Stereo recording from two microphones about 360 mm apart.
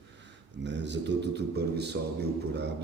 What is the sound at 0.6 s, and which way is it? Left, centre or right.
A man's voice, right.